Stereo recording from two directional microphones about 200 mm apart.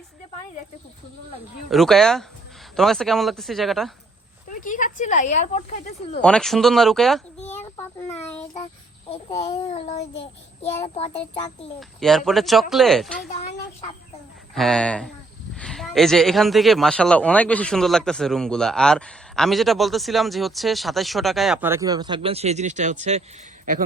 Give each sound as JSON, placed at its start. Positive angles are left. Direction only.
{"t": 1.7, "sound": "a man's voice", "side_deg": 0}
{"t": 4.4, "sound": "speech", "side_deg": 40}
{"t": 6.2, "sound": "a man's voice", "side_deg": 5}
{"t": 9.0, "sound": "a child's voice", "side_deg": 30}
{"t": 11.8, "sound": "a man's voice", "side_deg": 0}
{"t": 14.5, "sound": "a man's voice", "side_deg": 0}